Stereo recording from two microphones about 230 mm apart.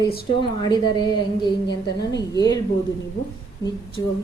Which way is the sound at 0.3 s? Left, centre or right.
Centre.